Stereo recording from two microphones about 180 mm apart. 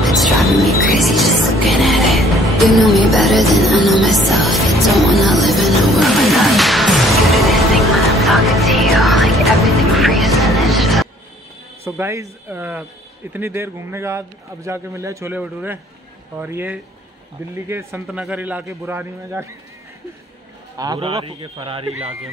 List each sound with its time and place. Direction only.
0.0 s music: centre (ahead or behind)
11.8 s a man's voice: 15° right (ahead or behind)
20.7 s a man's voice: 20° right (ahead or behind)